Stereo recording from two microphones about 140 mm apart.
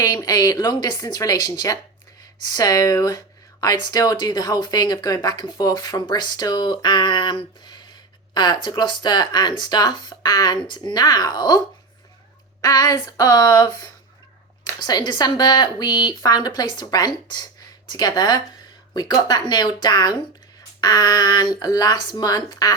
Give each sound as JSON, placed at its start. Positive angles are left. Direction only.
{"t": 0.0, "sound": "speech", "side_deg": 25}
{"t": 12.6, "sound": "speech", "side_deg": 25}